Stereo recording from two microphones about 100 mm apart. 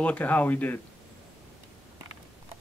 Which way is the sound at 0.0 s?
15° left (ahead or behind).